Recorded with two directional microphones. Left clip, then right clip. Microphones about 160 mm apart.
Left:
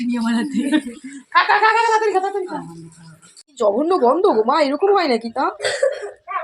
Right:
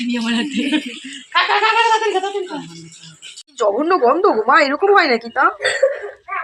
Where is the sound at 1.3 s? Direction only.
10° right (ahead or behind).